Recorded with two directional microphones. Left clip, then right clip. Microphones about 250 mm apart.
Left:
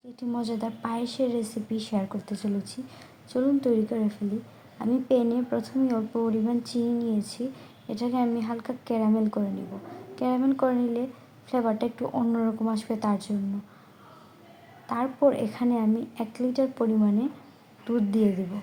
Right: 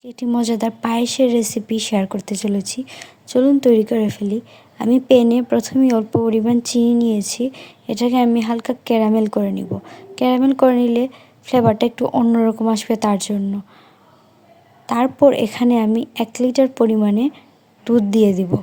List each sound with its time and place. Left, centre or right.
0.2 s a woman's voice: right
14.8 s a woman's voice: right